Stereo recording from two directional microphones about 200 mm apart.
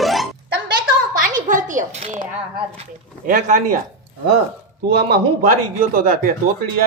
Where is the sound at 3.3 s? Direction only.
45° right (ahead or behind).